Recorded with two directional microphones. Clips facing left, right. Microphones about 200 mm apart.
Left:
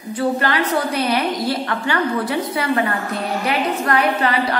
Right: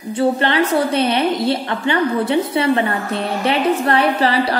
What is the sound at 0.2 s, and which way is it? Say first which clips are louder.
A woman's voice: right 3 dB; 25° right (ahead or behind).